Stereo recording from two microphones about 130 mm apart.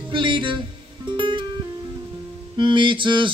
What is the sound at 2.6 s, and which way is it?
Music, 40° right (ahead or behind).